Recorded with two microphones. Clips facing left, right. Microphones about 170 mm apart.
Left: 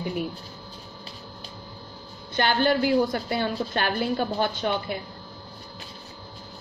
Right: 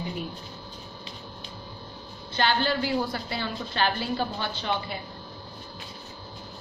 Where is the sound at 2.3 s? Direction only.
50° left (ahead or behind).